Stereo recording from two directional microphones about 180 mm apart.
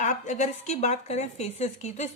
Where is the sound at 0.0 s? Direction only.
40° left (ahead or behind).